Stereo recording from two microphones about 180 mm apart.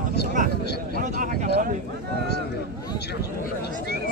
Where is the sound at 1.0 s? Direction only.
45° right (ahead or behind).